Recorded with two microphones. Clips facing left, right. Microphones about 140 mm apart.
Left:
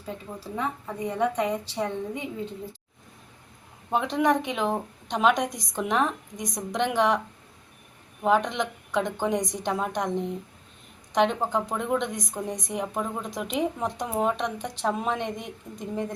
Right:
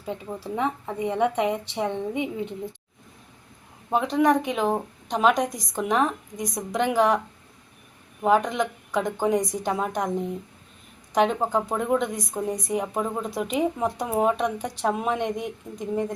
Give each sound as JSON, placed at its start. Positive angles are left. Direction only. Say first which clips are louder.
{"t": 0.1, "sound": "a woman's voice", "louder": "right 4 dB", "side_deg": -20}
{"t": 3.8, "sound": "speech", "louder": "right 3 dB", "side_deg": 0}
{"t": 8.2, "sound": "speech", "louder": "right 2 dB", "side_deg": -5}